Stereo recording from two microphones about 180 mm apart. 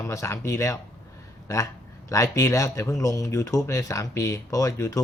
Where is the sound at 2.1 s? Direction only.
15° left (ahead or behind).